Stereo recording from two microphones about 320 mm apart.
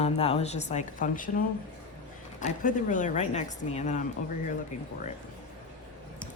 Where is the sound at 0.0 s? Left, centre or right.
Centre.